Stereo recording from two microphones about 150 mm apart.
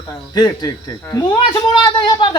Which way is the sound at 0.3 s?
25° left (ahead or behind).